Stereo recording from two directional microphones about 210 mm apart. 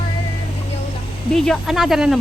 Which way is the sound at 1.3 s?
Centre (ahead or behind).